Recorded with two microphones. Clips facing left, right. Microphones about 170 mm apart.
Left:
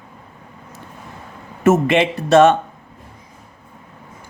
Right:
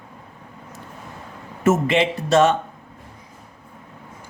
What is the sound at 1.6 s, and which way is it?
Speech, 60° left (ahead or behind).